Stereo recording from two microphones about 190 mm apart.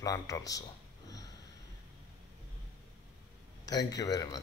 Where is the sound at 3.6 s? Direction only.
20° left (ahead or behind).